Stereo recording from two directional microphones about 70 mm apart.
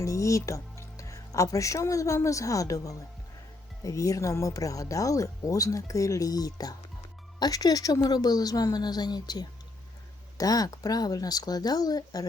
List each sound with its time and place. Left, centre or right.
0.0 s a woman's voice: left
10.3 s speech: left